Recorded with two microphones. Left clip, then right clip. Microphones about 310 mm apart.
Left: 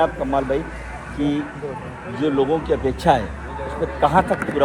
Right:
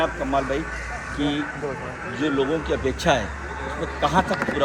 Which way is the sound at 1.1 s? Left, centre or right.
Left.